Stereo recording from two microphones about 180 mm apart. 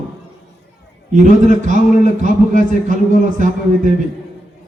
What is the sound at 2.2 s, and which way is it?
Speech, 45° right (ahead or behind).